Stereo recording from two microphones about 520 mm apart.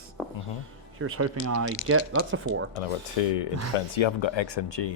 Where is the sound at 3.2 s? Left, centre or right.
Left.